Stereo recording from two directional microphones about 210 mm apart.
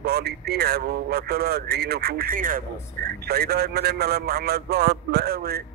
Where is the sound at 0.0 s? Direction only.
50° right (ahead or behind).